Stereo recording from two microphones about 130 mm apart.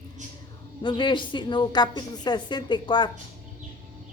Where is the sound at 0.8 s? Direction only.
40° left (ahead or behind).